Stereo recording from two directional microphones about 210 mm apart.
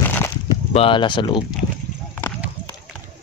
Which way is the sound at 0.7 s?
25° left (ahead or behind).